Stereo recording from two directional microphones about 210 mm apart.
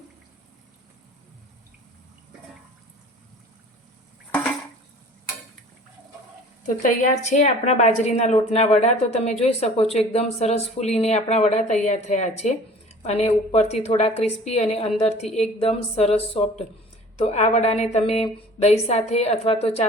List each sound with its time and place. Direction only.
6.8 s a woman's voice: 35° left (ahead or behind)